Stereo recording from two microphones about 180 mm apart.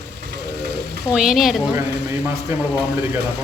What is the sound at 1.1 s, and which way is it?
Speech, 5° right (ahead or behind).